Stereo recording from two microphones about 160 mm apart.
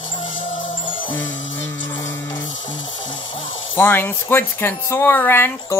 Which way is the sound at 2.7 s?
30° left (ahead or behind).